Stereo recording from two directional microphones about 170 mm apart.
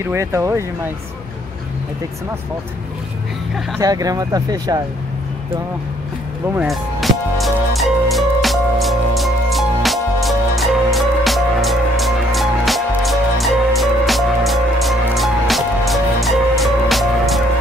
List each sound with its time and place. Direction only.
0.1 s speech: 15° right (ahead or behind)
3.8 s speech: 20° right (ahead or behind)
6.5 s music: 5° right (ahead or behind)